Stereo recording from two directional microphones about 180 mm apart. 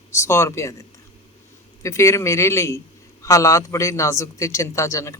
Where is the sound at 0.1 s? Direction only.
15° left (ahead or behind).